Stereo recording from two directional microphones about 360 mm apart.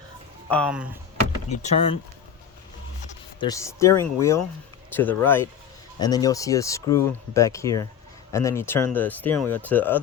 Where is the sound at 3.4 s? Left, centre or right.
Centre.